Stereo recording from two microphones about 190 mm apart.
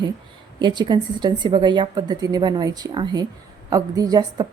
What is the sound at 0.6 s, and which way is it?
A woman's voice, 25° right (ahead or behind).